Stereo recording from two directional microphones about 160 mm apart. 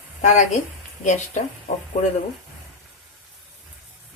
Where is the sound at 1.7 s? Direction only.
50° left (ahead or behind).